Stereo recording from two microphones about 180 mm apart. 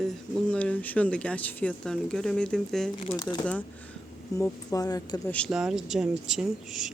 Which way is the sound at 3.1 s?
25° left (ahead or behind).